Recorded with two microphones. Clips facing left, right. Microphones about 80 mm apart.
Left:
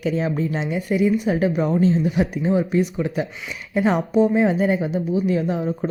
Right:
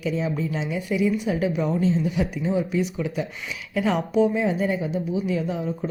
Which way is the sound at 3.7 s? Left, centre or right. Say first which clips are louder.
Left 4 dB; left.